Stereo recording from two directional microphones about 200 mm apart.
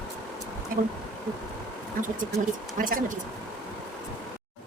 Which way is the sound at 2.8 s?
45° right (ahead or behind).